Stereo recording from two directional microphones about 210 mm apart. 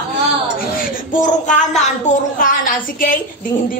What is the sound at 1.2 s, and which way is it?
A woman's voice, 35° left (ahead or behind).